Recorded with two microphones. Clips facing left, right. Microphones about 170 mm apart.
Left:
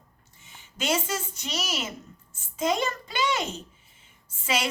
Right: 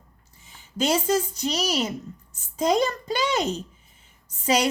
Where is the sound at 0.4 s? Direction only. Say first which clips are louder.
Right 5 dB; 35° right (ahead or behind).